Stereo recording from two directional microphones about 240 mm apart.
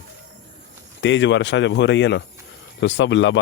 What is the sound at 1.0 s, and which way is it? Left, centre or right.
Speech, left.